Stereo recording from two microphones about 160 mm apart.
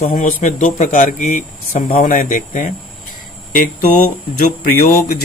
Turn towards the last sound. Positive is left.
turn(degrees=70)  # may be behind; listen again after turning